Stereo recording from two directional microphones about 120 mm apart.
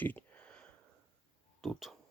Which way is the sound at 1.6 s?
Centre (ahead or behind).